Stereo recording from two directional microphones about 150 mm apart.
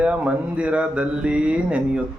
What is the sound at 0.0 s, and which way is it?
Speech, 5° right (ahead or behind).